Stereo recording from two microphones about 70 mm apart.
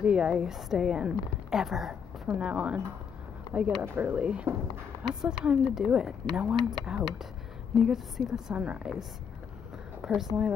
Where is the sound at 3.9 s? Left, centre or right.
Right.